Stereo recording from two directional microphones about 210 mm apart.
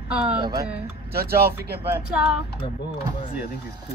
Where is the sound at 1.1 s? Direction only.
45° right (ahead or behind).